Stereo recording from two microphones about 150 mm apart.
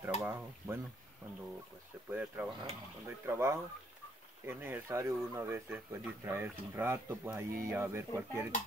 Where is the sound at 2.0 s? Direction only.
10° right (ahead or behind).